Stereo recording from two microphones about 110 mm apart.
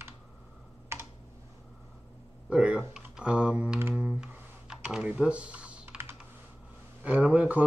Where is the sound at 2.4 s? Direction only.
10° right (ahead or behind).